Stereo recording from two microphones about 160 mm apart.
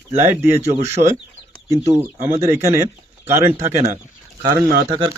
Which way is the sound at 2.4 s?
15° right (ahead or behind).